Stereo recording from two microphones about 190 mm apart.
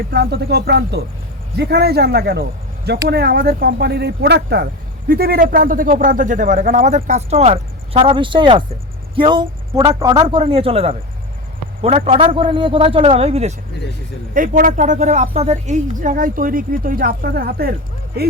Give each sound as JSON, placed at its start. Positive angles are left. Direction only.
{"t": 0.1, "sound": "a man's voice", "side_deg": -60}
{"t": 14.3, "sound": "speech", "side_deg": -45}